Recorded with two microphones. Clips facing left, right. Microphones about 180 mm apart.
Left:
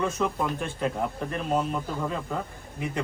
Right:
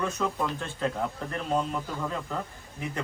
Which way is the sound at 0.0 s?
15° left (ahead or behind).